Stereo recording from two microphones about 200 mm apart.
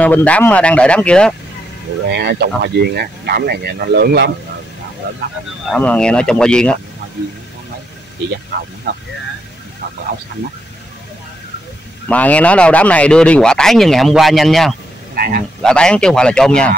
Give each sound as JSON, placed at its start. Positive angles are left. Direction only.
{"t": 0.0, "sound": "speech", "side_deg": 5}
{"t": 2.0, "sound": "speech", "side_deg": -55}
{"t": 5.7, "sound": "speech", "side_deg": 5}
{"t": 12.1, "sound": "speech", "side_deg": 5}
{"t": 15.1, "sound": "a man's voice", "side_deg": -45}
{"t": 15.6, "sound": "speech", "side_deg": 5}